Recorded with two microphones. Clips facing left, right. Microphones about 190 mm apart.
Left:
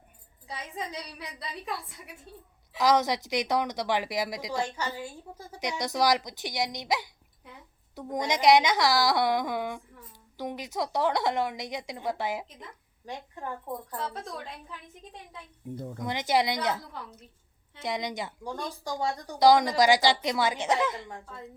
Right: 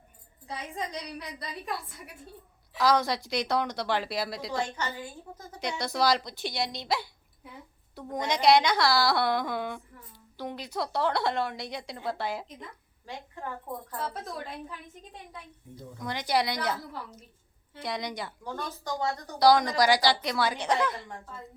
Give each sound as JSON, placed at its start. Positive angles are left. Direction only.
{"t": 0.4, "sound": "a woman's voice", "side_deg": 0}
{"t": 2.7, "sound": "a woman's voice", "side_deg": 20}
{"t": 16.0, "sound": "a woman's voice", "side_deg": 20}
{"t": 17.8, "sound": "a woman's voice", "side_deg": 20}